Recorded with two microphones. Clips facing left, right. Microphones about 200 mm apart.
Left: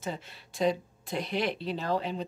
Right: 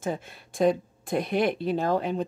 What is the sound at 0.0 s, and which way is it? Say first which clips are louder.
Speech: right 6 dB; 50° right (ahead or behind).